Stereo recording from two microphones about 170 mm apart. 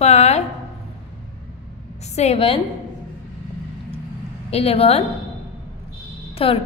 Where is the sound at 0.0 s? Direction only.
40° left (ahead or behind).